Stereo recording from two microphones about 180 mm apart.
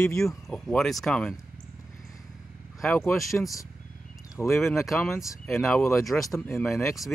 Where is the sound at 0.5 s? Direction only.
Centre (ahead or behind).